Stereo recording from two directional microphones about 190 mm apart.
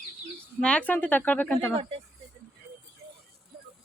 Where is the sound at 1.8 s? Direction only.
30° right (ahead or behind).